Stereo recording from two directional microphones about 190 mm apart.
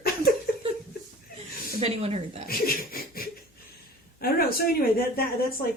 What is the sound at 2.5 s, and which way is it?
Laughter, 50° left (ahead or behind).